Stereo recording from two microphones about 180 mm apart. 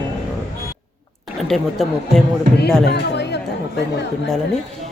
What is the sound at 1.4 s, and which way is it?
Speech, centre (ahead or behind).